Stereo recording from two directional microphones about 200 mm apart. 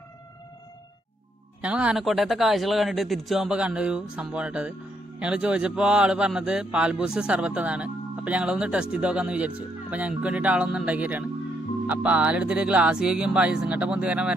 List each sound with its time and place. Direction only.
1.6 s speech: 5° right (ahead or behind)